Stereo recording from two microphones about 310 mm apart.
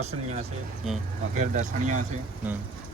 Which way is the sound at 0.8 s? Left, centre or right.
Centre.